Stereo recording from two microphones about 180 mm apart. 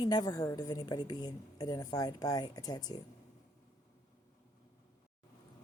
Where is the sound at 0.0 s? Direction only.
20° left (ahead or behind).